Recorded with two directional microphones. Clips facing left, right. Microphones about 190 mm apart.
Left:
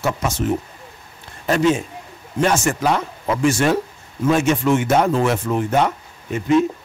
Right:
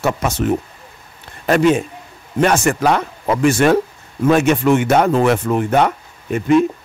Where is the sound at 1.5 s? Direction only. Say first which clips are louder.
Right 4 dB; 60° right (ahead or behind).